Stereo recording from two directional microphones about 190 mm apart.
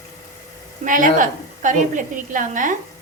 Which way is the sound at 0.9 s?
45° right (ahead or behind).